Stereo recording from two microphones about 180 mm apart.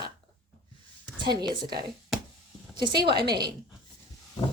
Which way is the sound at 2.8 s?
25° right (ahead or behind).